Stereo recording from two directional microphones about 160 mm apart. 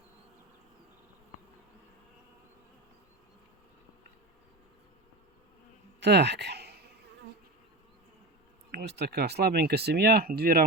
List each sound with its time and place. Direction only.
6.0 s speech: 90° right
8.7 s speech: 90° right; by 10.7 s 70° right (ahead or behind)